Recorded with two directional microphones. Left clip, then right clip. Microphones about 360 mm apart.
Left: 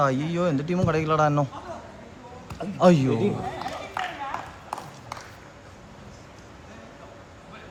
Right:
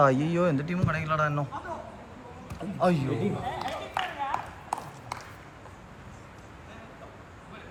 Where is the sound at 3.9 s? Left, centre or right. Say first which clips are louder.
Right 1 dB; right.